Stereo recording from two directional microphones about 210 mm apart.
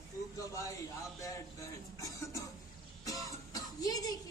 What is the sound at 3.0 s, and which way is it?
Music, 15° left (ahead or behind).